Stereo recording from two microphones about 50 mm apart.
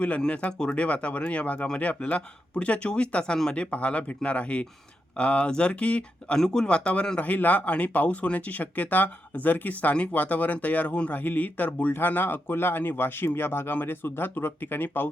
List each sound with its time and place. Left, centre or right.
0.6 s speech: left